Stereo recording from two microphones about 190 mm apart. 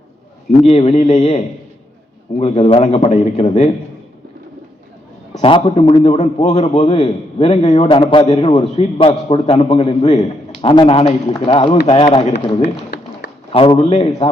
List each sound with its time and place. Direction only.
0.6 s a man's voice: 35° left (ahead or behind)
5.4 s a man's voice: 30° left (ahead or behind)
12.6 s a sound: 60° left (ahead or behind)
13.5 s a man's voice: 30° left (ahead or behind)